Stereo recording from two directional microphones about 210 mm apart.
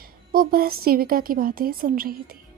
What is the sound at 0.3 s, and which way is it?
A woman's voice, 45° right (ahead or behind).